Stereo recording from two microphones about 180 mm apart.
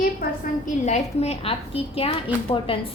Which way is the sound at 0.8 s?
35° left (ahead or behind).